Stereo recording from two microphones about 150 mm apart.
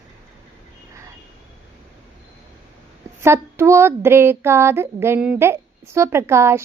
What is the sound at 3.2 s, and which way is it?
Speech, 15° right (ahead or behind).